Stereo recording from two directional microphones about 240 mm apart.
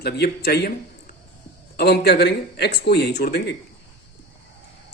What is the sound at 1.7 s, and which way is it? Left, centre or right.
Speech, left.